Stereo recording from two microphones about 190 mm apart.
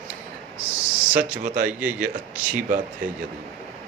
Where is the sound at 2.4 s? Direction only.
10° right (ahead or behind).